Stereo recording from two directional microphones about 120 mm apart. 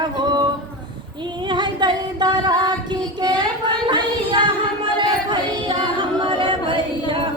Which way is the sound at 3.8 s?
40° right (ahead or behind).